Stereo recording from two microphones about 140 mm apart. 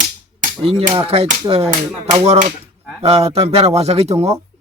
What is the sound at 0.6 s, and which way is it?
Speech, 45° right (ahead or behind).